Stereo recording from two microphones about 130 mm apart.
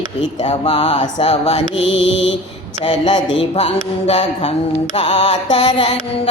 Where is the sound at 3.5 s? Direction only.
60° left (ahead or behind).